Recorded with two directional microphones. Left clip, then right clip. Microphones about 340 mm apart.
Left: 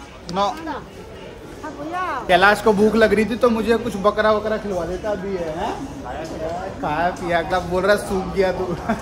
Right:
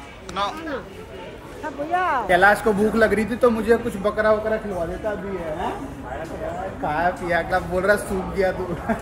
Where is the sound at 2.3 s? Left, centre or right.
Centre.